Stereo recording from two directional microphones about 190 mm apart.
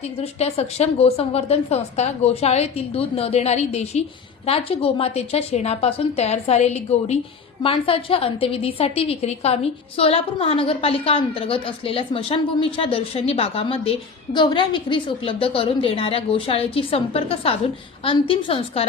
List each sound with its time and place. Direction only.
0.2 s a woman's voice: 30° left (ahead or behind)